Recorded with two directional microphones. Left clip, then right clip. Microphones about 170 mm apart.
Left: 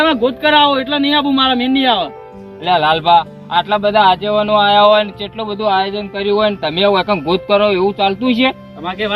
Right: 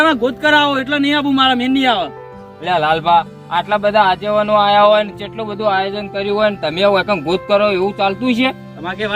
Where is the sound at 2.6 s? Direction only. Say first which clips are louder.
Left 2 dB; 20° right (ahead or behind).